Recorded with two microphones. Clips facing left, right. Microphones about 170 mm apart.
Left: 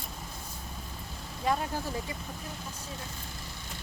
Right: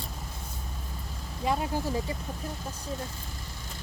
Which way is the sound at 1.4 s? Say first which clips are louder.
Right 1 dB; 10° right (ahead or behind).